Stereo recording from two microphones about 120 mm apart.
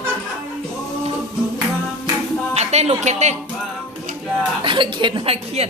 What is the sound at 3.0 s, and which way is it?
Speech, 70° right (ahead or behind).